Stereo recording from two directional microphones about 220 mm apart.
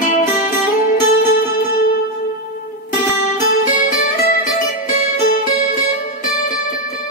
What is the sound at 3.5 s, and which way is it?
Music, 40° left (ahead or behind).